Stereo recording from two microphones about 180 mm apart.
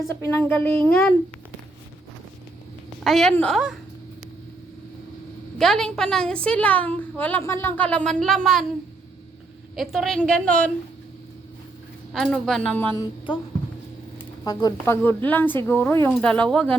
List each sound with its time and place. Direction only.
0.1 s a woman's voice: 10° left (ahead or behind)
3.0 s a woman's voice: centre (ahead or behind)
5.5 s a woman's voice: centre (ahead or behind)
9.7 s a woman's voice: centre (ahead or behind)
12.2 s a woman's voice: 5° left (ahead or behind)
13.0 s music: 25° left (ahead or behind)
14.4 s a woman's voice: 20° left (ahead or behind); by 16.6 s 5° left (ahead or behind)